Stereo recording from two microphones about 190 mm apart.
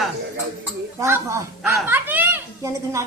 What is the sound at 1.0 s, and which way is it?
Speech, 15° right (ahead or behind).